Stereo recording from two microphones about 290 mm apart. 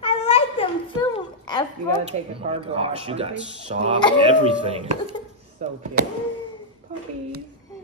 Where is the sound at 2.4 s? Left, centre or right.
Centre.